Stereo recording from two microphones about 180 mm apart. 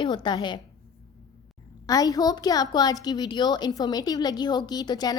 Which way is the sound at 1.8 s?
20° left (ahead or behind).